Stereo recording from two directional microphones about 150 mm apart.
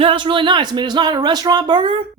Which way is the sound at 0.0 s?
35° right (ahead or behind).